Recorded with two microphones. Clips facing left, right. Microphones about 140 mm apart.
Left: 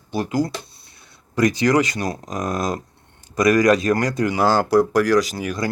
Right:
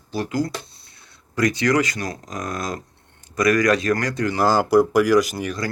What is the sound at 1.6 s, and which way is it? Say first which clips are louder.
Speech: left 2 dB; 20° left (ahead or behind).